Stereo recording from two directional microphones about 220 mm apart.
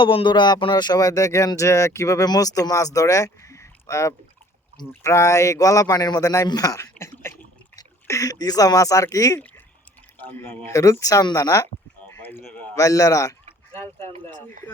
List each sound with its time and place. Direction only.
0.0 s speech: 25° left (ahead or behind)